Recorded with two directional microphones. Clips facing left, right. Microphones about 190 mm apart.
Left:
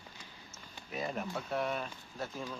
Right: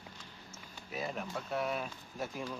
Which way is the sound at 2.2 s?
15° right (ahead or behind).